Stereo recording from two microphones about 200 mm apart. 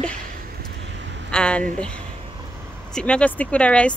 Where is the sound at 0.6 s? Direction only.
60° right (ahead or behind).